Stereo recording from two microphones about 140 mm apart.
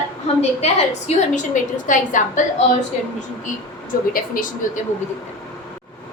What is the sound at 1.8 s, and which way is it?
A woman's voice, 65° left (ahead or behind).